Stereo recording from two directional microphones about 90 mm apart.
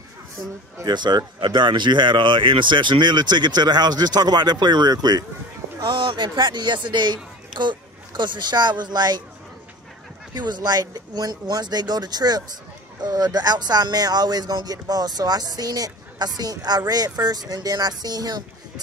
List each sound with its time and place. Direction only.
0.8 s speech: 55° right (ahead or behind)
5.8 s speech: 65° right (ahead or behind)
10.3 s speech: 55° right (ahead or behind)